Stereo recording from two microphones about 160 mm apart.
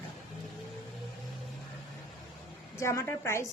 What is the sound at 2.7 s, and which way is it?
Speech, 20° left (ahead or behind).